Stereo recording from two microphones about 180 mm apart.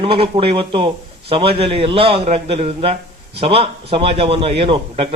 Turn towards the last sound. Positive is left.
turn(degrees=-30)  # may be behind; listen again after turning